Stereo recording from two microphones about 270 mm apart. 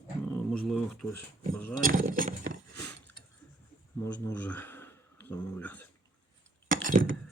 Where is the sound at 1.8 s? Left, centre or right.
Right.